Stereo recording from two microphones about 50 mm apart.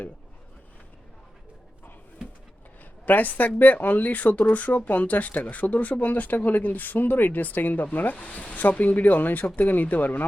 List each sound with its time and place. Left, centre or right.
3.1 s speech: left